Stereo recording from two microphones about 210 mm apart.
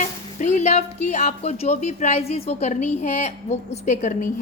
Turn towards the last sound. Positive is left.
turn(degrees=35)  # may be behind; listen again after turning